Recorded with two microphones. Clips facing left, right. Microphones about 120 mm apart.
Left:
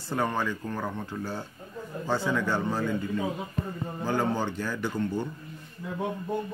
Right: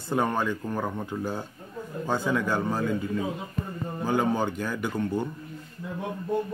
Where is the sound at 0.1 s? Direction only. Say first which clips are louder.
Right 3 dB; 15° right (ahead or behind).